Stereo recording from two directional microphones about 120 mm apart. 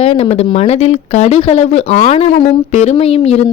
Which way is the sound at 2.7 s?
60° left (ahead or behind).